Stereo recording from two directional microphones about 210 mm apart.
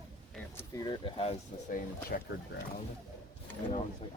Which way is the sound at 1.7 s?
40° left (ahead or behind).